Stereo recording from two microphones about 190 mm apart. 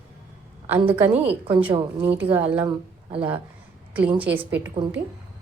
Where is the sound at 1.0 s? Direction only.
10° right (ahead or behind).